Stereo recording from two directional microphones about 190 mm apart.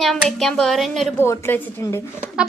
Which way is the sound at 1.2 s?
10° left (ahead or behind).